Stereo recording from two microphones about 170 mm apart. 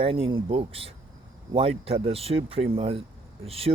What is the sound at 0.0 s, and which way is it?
Speech, 35° right (ahead or behind).